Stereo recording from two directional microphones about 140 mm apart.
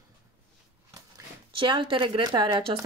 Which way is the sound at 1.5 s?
35° right (ahead or behind).